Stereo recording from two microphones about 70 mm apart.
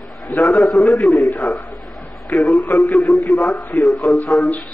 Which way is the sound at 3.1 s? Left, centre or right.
Left.